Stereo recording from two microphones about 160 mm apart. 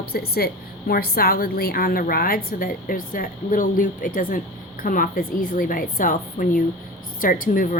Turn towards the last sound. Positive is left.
turn(degrees=60)  # may be behind; listen again after turning